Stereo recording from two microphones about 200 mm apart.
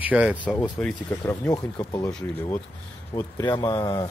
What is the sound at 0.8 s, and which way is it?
Speech, 5° left (ahead or behind).